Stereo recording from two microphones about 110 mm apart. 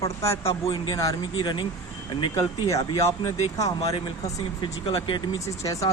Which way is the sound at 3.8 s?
65° left (ahead or behind).